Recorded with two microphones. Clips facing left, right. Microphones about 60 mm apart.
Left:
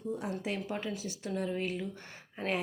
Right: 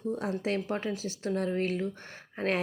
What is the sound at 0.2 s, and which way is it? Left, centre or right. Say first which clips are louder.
A woman's voice: right 5 dB; right.